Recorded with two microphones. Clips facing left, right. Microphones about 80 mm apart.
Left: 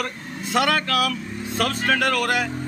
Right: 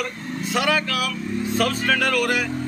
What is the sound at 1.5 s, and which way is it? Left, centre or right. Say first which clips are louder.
Speech: even; left.